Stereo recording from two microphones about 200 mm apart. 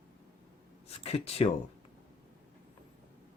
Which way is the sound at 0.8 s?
30° left (ahead or behind).